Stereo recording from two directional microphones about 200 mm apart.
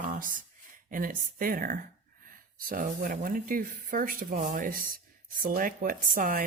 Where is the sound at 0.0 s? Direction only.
40° right (ahead or behind).